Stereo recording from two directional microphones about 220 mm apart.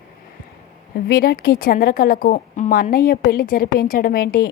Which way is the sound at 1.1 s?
40° left (ahead or behind).